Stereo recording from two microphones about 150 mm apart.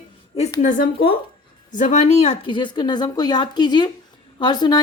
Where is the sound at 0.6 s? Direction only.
60° left (ahead or behind); by 2.4 s 45° left (ahead or behind).